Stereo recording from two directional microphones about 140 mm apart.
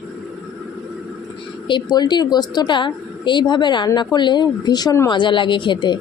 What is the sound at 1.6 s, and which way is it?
Speech, 35° left (ahead or behind).